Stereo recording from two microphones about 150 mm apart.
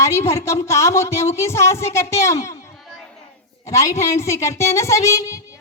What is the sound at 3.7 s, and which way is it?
A woman's voice, 20° left (ahead or behind).